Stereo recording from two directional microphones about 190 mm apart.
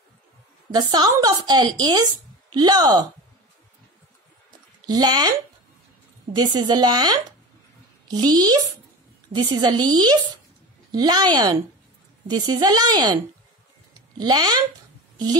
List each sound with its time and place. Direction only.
0.7 s a woman's voice: 20° right (ahead or behind)
4.8 s a woman's voice: 20° right (ahead or behind)
6.3 s a woman's voice: 20° right (ahead or behind)